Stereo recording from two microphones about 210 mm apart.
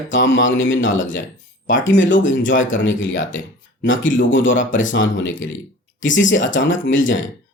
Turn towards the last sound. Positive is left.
turn(degrees=65)  # may be behind; listen again after turning